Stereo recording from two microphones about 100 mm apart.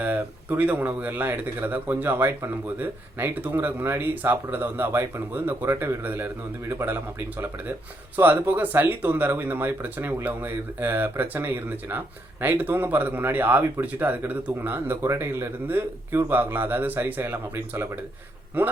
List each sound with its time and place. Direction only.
0.0 s speech: 15° right (ahead or behind)